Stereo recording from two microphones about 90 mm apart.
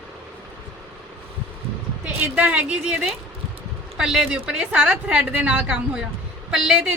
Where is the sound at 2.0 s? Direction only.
15° right (ahead or behind).